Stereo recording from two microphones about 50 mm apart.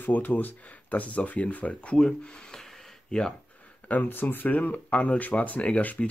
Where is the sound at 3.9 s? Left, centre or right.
Left.